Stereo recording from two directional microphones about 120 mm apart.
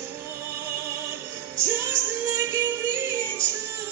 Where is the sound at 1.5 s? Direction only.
20° right (ahead or behind).